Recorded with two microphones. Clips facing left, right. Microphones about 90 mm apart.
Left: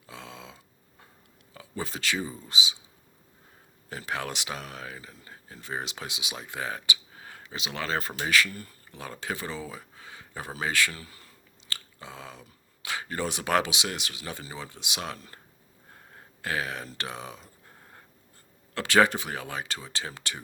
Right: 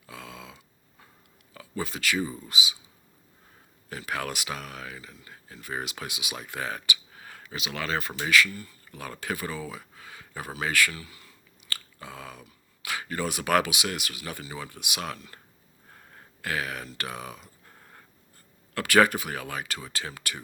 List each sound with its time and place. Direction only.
0.1 s a sound: 25° left (ahead or behind)
1.5 s speech: 30° left (ahead or behind)
3.8 s speech: 25° left (ahead or behind)
8.9 s speech: 25° left (ahead or behind)
10.9 s speech: 40° left (ahead or behind)
11.7 s chewing: 25° left (ahead or behind)
12.8 s speech: 25° left (ahead or behind)
16.4 s speech: 25° left (ahead or behind)
18.7 s speech: 25° left (ahead or behind)